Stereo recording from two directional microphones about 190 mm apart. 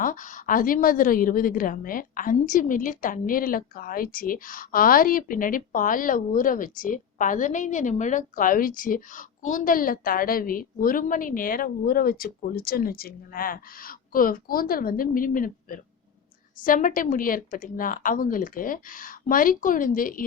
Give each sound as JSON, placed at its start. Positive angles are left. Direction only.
{"t": 0.0, "sound": "a woman's voice", "side_deg": 45}